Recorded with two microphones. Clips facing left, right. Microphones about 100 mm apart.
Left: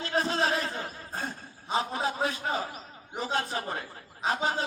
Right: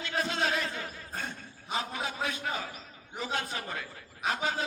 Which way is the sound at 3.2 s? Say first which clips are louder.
Left 4 dB; 35° left (ahead or behind).